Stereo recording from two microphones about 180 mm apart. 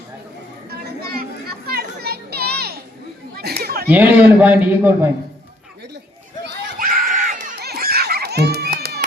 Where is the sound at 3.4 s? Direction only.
60° right (ahead or behind).